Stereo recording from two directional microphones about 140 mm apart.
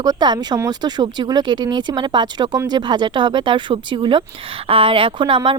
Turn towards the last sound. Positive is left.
turn(degrees=-35)  # may be behind; listen again after turning